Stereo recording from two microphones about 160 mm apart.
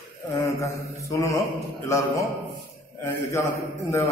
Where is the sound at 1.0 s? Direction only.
20° left (ahead or behind).